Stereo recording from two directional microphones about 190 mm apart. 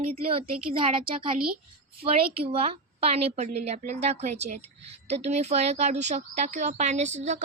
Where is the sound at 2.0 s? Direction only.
30° right (ahead or behind).